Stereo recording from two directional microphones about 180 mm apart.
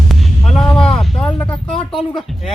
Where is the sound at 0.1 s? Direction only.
Centre (ahead or behind).